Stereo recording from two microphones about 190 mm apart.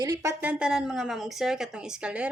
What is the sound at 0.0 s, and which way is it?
Speech, 20° right (ahead or behind).